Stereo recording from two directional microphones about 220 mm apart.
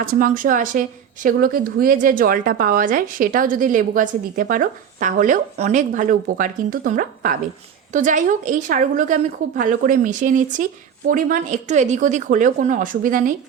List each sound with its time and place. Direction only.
0.0 s speech: 40° right (ahead or behind)